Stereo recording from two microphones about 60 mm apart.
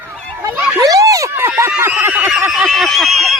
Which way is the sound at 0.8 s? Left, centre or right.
Right.